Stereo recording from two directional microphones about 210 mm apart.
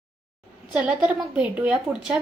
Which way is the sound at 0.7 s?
5° right (ahead or behind).